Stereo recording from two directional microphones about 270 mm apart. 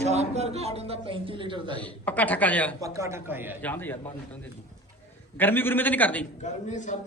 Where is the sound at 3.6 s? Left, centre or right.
Centre.